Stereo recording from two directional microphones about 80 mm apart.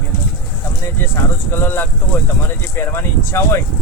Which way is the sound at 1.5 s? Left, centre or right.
Left.